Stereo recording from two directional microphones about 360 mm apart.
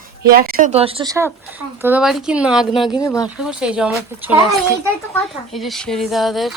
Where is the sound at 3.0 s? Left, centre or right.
Centre.